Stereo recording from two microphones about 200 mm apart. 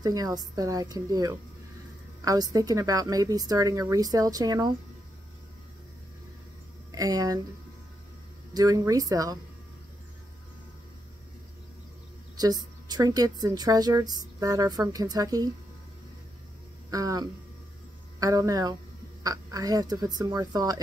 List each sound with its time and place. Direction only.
0.0 s a woman's voice: 20° right (ahead or behind)
6.9 s a woman's voice: 20° right (ahead or behind)
8.5 s a woman's voice: 15° right (ahead or behind)
12.4 s a woman's voice: 20° right (ahead or behind)
16.9 s a woman's voice: 20° right (ahead or behind)